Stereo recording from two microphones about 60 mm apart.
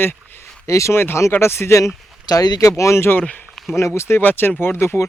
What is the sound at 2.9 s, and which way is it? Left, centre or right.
Speech, left.